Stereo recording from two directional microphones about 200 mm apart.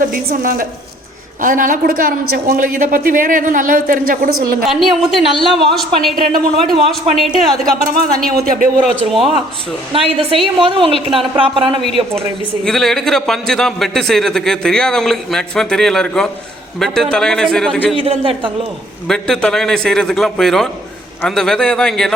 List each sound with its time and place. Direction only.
0.0 s speech: 45° right (ahead or behind)
4.7 s a man's voice: centre (ahead or behind)
7.6 s speech: 45° right (ahead or behind)
9.0 s a man's voice: centre (ahead or behind)
9.9 s a man's voice: 30° right (ahead or behind)
12.6 s a man's voice: centre (ahead or behind)
17.9 s a man's voice: 25° right (ahead or behind)
19.0 s a man's voice: 5° left (ahead or behind)